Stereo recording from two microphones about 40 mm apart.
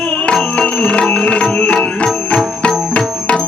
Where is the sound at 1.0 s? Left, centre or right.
Left.